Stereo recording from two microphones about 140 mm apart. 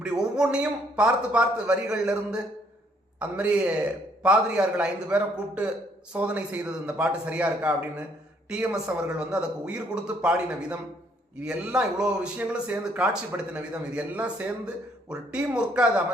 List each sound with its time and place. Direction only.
0.0 s speech: 5° right (ahead or behind)